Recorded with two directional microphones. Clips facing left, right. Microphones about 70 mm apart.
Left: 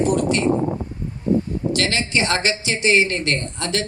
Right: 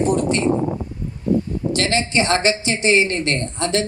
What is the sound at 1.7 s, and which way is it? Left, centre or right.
Speech, right.